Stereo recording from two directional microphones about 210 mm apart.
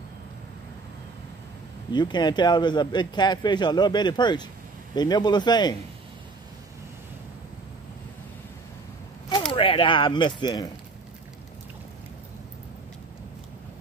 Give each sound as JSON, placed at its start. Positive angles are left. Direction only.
{"t": 1.9, "sound": "speech", "side_deg": 20}
{"t": 9.5, "sound": "speech", "side_deg": 25}